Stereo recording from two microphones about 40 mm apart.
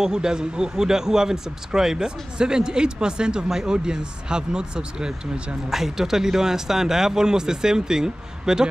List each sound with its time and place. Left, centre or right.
0.0 s speech: centre
5.7 s speech: centre